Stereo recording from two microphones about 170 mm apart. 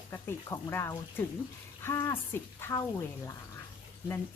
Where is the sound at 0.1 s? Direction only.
15° left (ahead or behind).